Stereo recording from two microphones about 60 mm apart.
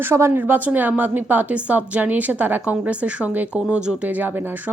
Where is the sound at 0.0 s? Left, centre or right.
Right.